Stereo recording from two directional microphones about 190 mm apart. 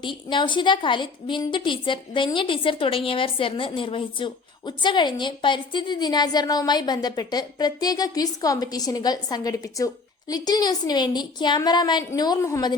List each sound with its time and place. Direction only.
0.0 s a woman's voice: 25° left (ahead or behind)